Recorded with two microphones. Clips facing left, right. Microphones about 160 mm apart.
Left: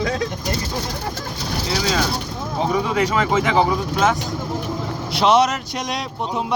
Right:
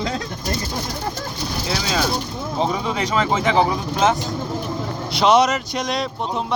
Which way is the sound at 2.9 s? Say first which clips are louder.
Left 2 dB; 20° right (ahead or behind).